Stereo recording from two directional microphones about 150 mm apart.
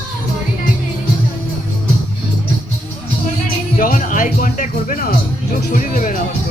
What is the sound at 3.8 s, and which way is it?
Speech, 65° left (ahead or behind).